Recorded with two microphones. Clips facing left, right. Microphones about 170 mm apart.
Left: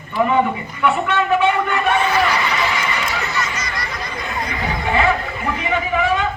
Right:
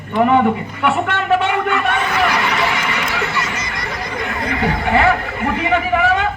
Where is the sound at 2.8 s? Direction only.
60° right (ahead or behind).